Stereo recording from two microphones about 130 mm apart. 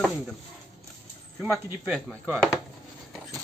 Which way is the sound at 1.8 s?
10° right (ahead or behind).